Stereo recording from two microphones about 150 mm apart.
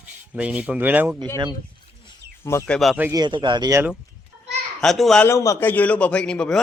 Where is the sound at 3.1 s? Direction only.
30° right (ahead or behind).